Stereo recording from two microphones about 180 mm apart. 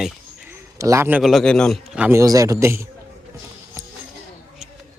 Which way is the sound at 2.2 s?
20° right (ahead or behind).